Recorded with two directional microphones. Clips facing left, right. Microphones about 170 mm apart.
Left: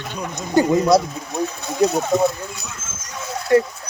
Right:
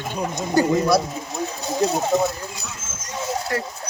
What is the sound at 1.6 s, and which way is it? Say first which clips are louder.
Speech: left 2 dB; 35° right (ahead or behind).